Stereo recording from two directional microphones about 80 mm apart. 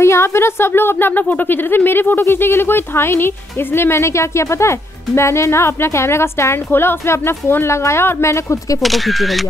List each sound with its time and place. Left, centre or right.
0.0 s speech: left
8.8 s speech: centre